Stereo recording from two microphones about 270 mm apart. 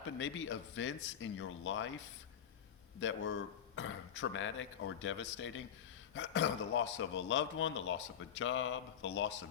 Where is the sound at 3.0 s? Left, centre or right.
Left.